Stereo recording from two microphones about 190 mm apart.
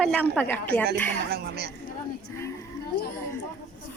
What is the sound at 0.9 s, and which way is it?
Speech, 60° right (ahead or behind).